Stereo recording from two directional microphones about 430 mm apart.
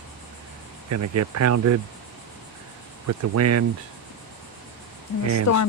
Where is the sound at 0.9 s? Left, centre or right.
Right.